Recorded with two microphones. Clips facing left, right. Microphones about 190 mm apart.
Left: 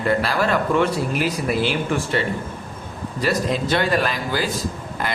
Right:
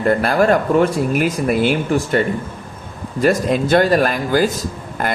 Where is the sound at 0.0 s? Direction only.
50° right (ahead or behind).